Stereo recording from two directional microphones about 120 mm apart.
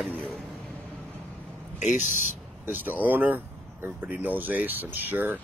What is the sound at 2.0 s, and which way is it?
Speech, 90° left.